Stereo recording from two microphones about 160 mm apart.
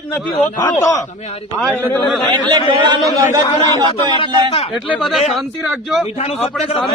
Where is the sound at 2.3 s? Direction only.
30° right (ahead or behind).